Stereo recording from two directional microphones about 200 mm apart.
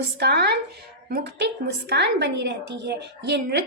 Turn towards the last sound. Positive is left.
turn(degrees=-55)  # may be behind; listen again after turning